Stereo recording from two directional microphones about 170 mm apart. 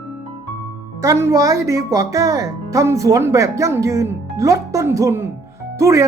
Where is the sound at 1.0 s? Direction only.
15° right (ahead or behind).